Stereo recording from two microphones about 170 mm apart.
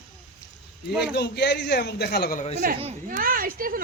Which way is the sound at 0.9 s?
Centre (ahead or behind).